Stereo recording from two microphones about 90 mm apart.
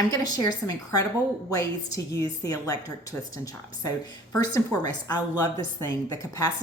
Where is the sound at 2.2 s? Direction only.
45° left (ahead or behind).